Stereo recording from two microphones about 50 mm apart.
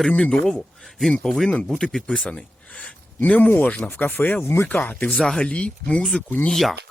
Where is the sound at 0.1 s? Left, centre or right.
Centre.